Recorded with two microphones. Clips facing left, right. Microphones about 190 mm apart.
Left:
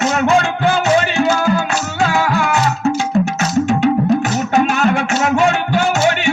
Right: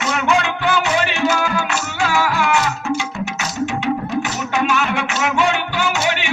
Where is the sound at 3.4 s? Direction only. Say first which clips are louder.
Left 8 dB; 45° left (ahead or behind).